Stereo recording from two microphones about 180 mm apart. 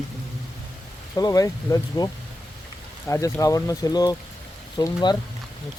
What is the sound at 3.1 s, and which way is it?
Speech, 15° left (ahead or behind).